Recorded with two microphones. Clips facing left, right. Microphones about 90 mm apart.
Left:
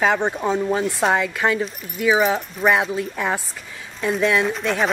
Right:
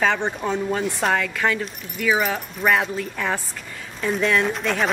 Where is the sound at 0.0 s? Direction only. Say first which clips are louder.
Left 2 dB; 10° left (ahead or behind).